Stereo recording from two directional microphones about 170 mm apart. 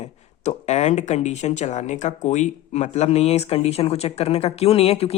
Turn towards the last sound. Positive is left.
turn(degrees=35)  # may be behind; listen again after turning